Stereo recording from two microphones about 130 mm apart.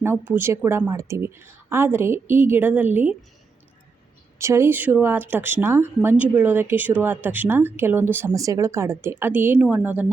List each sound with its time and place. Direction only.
0.0 s speech: 15° right (ahead or behind)
4.4 s speech: 20° right (ahead or behind)